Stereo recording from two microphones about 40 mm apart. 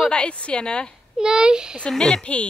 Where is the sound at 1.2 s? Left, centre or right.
Centre.